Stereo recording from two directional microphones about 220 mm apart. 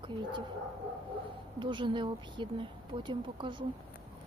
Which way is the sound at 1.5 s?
20° right (ahead or behind).